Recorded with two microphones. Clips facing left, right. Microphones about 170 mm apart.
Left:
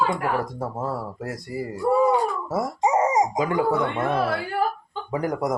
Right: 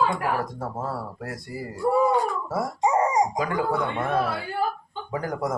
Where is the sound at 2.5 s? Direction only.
20° left (ahead or behind).